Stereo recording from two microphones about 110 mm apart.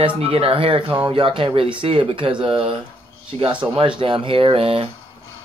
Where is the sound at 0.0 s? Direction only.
60° right (ahead or behind).